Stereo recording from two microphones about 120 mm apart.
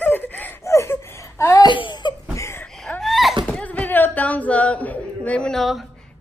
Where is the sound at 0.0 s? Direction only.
15° left (ahead or behind).